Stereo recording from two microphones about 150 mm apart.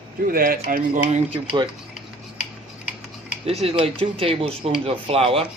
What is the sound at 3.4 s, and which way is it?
Speech, 40° right (ahead or behind).